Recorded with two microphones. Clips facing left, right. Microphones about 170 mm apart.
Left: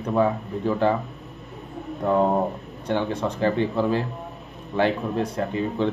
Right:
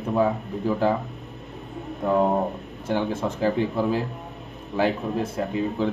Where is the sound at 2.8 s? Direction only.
5° right (ahead or behind).